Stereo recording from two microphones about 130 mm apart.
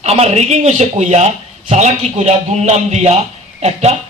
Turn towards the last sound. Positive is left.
turn(degrees=-55)  # may be behind; listen again after turning